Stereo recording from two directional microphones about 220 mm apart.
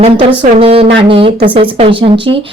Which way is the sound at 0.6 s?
25° right (ahead or behind).